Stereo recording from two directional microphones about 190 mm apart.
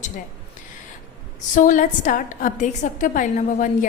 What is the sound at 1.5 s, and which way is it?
A woman's voice, 45° left (ahead or behind).